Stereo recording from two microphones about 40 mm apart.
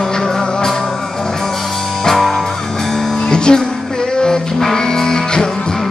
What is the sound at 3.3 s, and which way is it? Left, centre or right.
Music, left.